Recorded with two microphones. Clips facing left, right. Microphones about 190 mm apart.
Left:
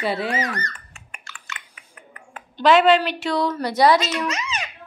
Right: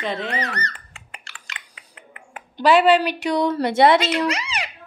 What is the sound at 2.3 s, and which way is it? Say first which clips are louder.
A woman's voice: even; 15° right (ahead or behind).